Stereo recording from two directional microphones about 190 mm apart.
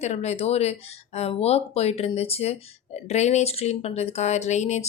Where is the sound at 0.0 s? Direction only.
35° left (ahead or behind).